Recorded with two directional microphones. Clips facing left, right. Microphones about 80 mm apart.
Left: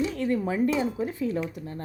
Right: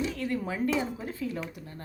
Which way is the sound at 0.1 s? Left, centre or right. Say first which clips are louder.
Left 5 dB; left.